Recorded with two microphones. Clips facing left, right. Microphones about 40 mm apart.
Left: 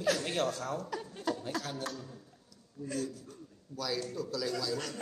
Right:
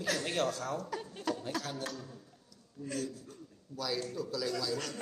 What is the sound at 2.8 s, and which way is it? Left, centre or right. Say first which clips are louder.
Speech: left 1 dB; right.